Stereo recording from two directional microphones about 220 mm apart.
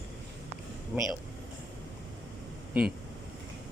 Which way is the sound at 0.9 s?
5° right (ahead or behind).